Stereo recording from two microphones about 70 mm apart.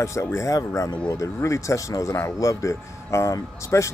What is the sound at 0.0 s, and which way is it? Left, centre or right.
Speech, left.